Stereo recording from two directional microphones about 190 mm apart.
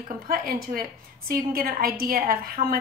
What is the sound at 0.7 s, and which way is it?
A woman's voice, 50° right (ahead or behind).